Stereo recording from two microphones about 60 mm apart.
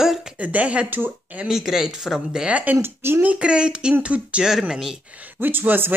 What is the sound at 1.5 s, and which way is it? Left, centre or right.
A woman's voice, centre.